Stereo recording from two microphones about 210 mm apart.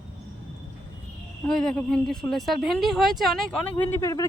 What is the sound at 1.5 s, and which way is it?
Speech, centre (ahead or behind).